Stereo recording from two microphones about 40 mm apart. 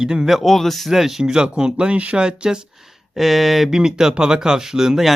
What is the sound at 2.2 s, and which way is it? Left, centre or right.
Speech, right.